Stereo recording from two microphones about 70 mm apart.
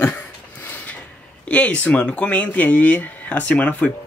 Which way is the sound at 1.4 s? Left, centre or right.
Centre.